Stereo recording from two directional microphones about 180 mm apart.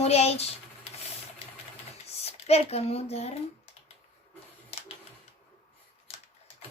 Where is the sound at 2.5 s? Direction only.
35° left (ahead or behind).